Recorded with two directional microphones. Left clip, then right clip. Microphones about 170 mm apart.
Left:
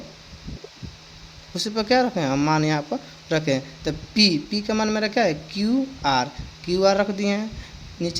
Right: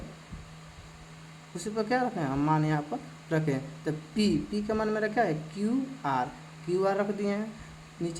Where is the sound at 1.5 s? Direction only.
40° left (ahead or behind).